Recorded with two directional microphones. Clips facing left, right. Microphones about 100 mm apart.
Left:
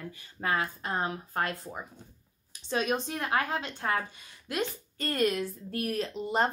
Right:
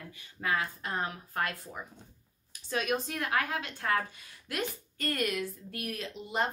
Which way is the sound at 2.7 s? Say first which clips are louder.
Left 2 dB; 25° left (ahead or behind).